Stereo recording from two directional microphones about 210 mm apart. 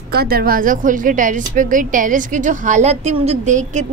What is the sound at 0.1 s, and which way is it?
A woman's voice, 50° right (ahead or behind).